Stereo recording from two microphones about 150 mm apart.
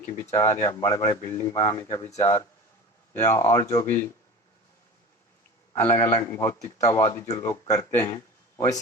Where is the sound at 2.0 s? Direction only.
45° left (ahead or behind).